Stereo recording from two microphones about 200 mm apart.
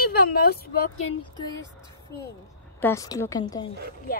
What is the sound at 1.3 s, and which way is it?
Speech, 15° left (ahead or behind).